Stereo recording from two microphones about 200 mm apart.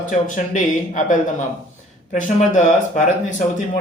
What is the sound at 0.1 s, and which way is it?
Speech, 40° left (ahead or behind).